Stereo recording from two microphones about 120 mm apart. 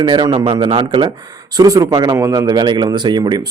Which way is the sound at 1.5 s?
30° right (ahead or behind).